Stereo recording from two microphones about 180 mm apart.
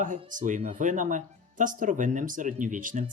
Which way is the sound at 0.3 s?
45° right (ahead or behind).